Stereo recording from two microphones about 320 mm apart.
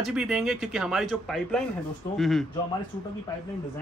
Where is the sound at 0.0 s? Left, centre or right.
Centre.